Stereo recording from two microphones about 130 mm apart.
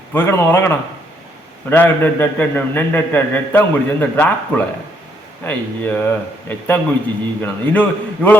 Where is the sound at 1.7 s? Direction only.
15° left (ahead or behind).